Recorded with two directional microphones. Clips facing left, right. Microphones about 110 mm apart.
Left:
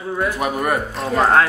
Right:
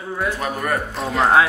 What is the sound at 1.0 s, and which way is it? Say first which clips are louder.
Speech: left 1 dB; centre (ahead or behind).